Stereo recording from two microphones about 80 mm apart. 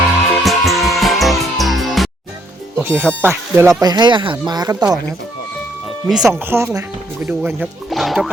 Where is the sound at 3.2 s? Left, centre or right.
Right.